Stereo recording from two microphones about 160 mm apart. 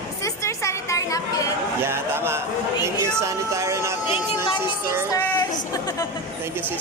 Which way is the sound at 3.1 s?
20° right (ahead or behind).